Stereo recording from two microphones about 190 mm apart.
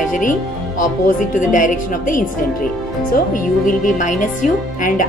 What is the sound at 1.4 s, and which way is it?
Speech, 45° left (ahead or behind).